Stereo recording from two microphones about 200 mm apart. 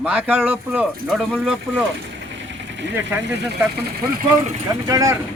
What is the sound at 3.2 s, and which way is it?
Speech, 55° right (ahead or behind).